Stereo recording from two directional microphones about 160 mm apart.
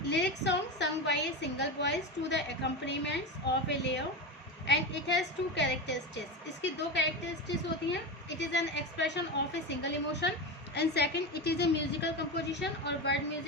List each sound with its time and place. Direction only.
0.1 s a woman's voice: 90° left